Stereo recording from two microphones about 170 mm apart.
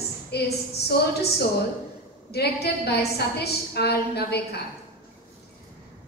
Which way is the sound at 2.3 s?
70° left (ahead or behind).